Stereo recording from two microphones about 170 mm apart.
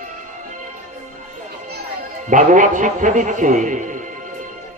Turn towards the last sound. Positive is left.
turn(degrees=-50)  # may be behind; listen again after turning